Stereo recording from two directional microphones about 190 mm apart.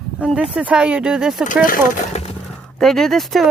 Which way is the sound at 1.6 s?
45° left (ahead or behind).